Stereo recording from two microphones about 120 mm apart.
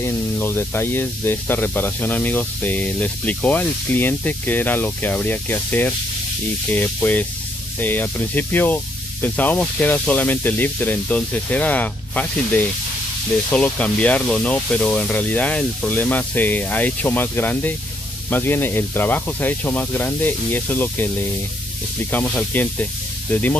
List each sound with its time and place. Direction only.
0.0 s speech: 20° left (ahead or behind)
22.1 s speech: 15° left (ahead or behind)